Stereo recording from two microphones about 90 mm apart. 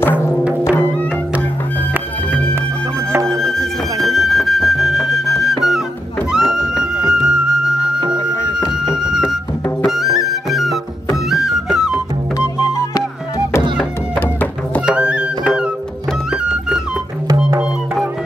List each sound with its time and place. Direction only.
0.4 s music: 15° right (ahead or behind)
3.1 s music: 35° right (ahead or behind)
4.0 s flute: centre (ahead or behind)
6.3 s music: 5° right (ahead or behind)
12.4 s music: 35° left (ahead or behind)
14.9 s music: 10° right (ahead or behind)